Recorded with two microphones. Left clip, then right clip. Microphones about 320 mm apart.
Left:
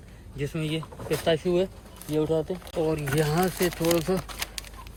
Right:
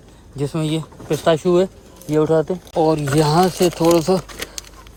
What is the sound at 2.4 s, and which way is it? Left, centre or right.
Speech, right.